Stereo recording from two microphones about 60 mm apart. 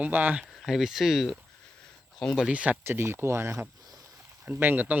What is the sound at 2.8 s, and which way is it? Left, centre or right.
Speech, right.